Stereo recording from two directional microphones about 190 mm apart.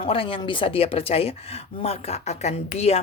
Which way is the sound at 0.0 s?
30° left (ahead or behind).